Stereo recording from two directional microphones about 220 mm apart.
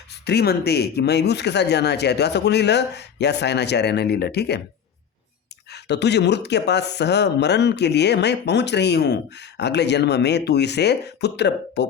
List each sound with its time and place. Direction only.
0.1 s speech: 50° left (ahead or behind)
5.7 s speech: 50° left (ahead or behind)